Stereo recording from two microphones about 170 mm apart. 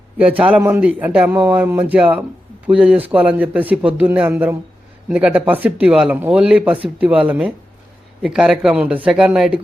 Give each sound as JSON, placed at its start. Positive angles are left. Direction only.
{"t": 0.2, "sound": "speech", "side_deg": -5}